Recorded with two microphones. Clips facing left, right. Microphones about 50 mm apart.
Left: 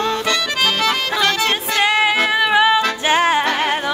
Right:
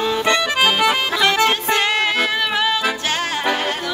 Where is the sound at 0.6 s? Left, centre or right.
Centre.